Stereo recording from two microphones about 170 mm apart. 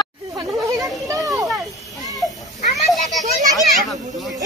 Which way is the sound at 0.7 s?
20° right (ahead or behind).